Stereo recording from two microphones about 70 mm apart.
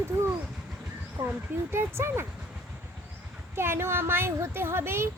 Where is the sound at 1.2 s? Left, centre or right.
Right.